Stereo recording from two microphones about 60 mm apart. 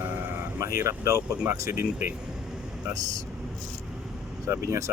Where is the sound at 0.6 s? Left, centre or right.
Right.